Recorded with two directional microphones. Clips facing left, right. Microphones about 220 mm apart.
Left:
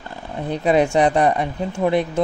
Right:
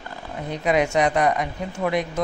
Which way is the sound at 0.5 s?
30° left (ahead or behind).